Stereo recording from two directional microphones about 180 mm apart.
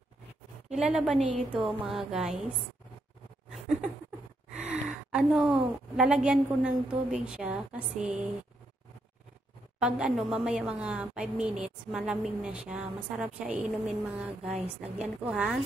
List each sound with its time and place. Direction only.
0.7 s a woman's voice: 5° right (ahead or behind)
4.6 s gasp: 5° right (ahead or behind)
5.9 s a woman's voice: 5° right (ahead or behind)
9.8 s a woman's voice: 5° right (ahead or behind)